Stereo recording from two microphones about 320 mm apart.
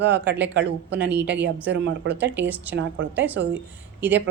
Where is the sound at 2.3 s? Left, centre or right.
Centre.